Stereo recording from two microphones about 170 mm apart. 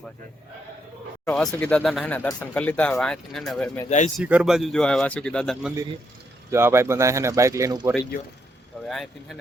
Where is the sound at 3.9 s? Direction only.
45° left (ahead or behind).